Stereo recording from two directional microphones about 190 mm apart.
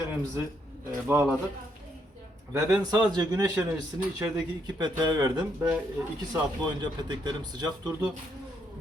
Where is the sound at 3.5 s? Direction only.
10° right (ahead or behind).